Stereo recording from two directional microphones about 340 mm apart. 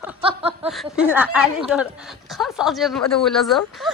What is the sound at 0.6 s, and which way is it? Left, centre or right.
A woman's voice, centre.